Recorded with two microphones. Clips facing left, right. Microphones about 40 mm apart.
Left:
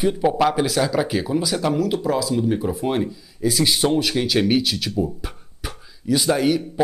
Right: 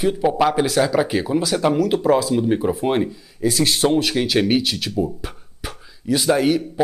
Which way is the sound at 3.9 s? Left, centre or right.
Centre.